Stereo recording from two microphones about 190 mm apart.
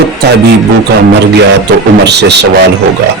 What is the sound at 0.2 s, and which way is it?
Speech, 60° right (ahead or behind).